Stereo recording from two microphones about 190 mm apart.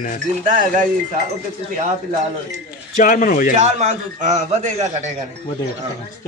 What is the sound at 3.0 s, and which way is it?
Speech, 45° left (ahead or behind).